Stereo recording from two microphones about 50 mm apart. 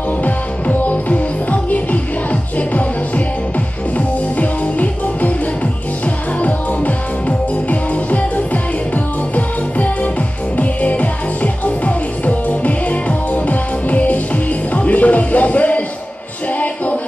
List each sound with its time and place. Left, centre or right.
0.2 s music: left